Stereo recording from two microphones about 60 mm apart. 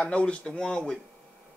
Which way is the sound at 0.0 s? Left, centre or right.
Centre.